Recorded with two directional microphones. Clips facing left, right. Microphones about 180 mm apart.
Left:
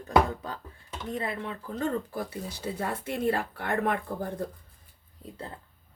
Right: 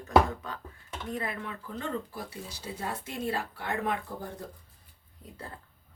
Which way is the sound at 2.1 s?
55° left (ahead or behind).